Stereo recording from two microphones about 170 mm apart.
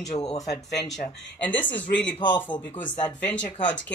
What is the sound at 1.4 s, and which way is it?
Speech, 10° left (ahead or behind).